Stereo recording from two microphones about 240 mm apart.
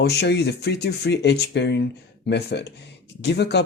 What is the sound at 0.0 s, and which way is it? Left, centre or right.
Speech, left.